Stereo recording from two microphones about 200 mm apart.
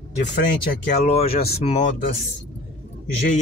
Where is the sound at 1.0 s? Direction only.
30° left (ahead or behind).